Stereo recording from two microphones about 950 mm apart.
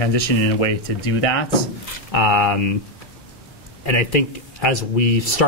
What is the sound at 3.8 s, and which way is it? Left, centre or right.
Speech, left.